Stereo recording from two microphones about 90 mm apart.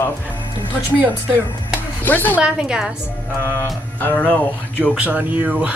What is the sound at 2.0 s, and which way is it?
Speech, 20° left (ahead or behind).